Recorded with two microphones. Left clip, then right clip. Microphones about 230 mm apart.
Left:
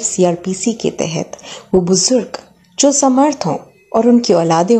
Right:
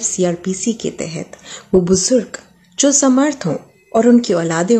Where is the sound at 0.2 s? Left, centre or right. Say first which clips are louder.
Left 5 dB; centre.